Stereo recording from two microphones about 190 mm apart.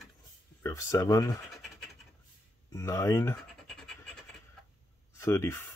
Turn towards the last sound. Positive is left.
turn(degrees=15)  # may be behind; listen again after turning